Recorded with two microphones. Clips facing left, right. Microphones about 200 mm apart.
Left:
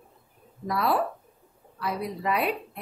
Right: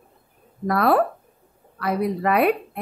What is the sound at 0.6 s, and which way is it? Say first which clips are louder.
Speech: right 7 dB; 60° right (ahead or behind).